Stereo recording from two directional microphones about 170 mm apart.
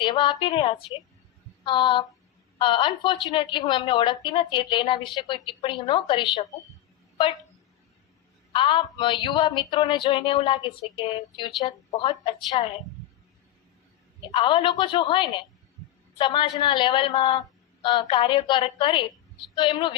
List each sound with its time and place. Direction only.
0.0 s a woman's voice: 25° left (ahead or behind)
8.5 s a woman's voice: 30° left (ahead or behind)
11.6 s a woman's voice: 30° left (ahead or behind)
14.3 s a woman's voice: 25° left (ahead or behind)